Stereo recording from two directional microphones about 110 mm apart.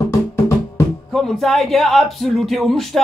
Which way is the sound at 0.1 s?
25° left (ahead or behind).